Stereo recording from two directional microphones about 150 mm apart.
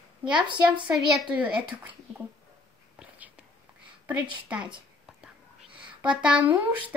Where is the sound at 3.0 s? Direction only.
10° right (ahead or behind).